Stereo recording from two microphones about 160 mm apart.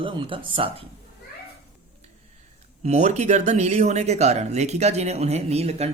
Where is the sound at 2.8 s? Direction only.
45° right (ahead or behind).